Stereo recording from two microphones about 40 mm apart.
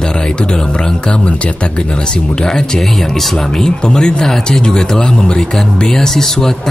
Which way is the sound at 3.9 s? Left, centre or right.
Left.